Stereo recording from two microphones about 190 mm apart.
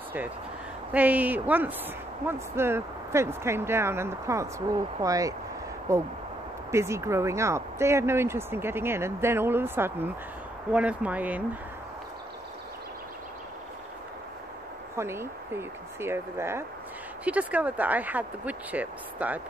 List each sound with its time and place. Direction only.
0.9 s speech: 10° right (ahead or behind)
15.0 s speech: 15° right (ahead or behind)